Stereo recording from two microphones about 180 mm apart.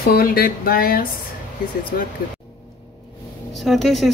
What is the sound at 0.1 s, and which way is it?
Speech, 55° left (ahead or behind).